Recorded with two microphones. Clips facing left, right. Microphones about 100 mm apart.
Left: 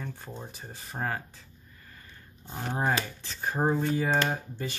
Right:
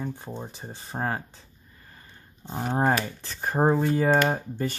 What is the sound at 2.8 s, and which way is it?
Speech, 50° right (ahead or behind).